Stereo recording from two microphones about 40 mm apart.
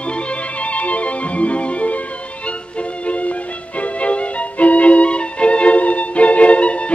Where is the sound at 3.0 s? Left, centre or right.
Left.